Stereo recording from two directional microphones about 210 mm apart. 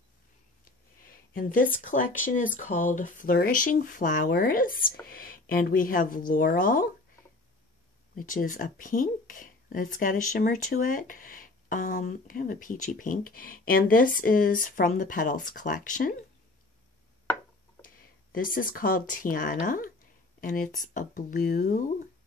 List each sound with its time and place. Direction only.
1.0 s speech: 40° left (ahead or behind)
8.2 s speech: 40° left (ahead or behind)
17.8 s speech: 40° left (ahead or behind)